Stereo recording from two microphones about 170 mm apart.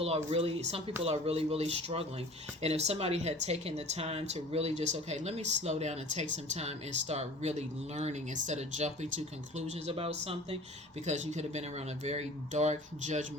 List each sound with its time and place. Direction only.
0.0 s speech: 35° right (ahead or behind)